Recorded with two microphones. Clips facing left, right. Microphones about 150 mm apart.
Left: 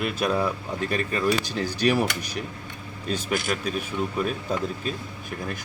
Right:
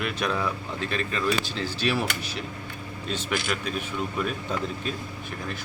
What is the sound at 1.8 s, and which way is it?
Speech, 45° left (ahead or behind).